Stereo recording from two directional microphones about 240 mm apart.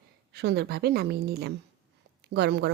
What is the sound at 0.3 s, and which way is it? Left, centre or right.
Speech, right.